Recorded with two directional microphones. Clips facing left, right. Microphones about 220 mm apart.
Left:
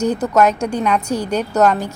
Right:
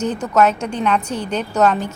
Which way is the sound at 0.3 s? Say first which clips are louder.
Right 1 dB; 10° left (ahead or behind).